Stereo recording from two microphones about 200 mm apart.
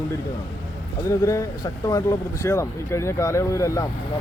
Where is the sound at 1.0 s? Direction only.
15° left (ahead or behind).